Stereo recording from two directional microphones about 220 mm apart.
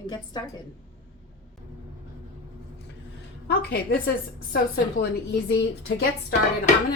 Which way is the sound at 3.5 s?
45° left (ahead or behind).